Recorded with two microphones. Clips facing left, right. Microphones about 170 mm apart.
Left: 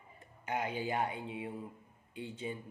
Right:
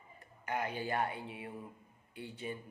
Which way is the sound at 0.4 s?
15° left (ahead or behind).